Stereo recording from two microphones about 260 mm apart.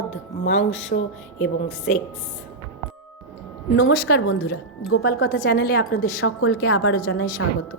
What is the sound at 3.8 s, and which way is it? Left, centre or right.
A woman's voice, left.